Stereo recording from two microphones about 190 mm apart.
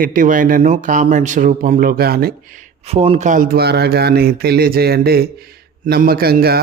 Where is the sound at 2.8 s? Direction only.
30° right (ahead or behind).